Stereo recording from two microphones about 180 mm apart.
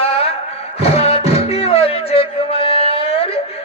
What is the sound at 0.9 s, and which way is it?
Music, 35° left (ahead or behind).